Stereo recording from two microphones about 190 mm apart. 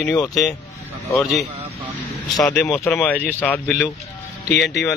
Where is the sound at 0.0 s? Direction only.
5° left (ahead or behind).